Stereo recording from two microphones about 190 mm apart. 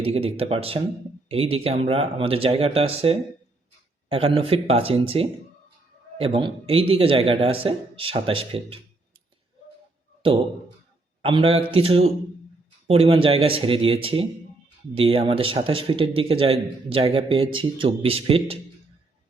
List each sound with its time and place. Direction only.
0.0 s a man's voice: 30° right (ahead or behind)
11.2 s a man's voice: 30° right (ahead or behind)